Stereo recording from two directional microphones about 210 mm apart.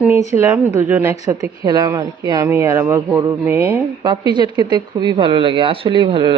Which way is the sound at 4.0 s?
20° right (ahead or behind).